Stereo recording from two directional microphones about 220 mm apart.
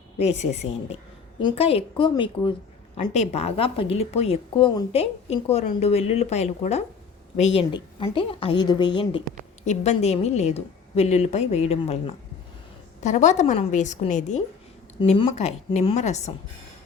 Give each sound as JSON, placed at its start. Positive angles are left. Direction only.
{"t": 0.2, "sound": "a woman's voice", "side_deg": 30}